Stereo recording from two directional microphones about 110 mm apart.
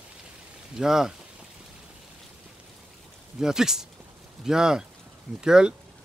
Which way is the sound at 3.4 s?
5° right (ahead or behind).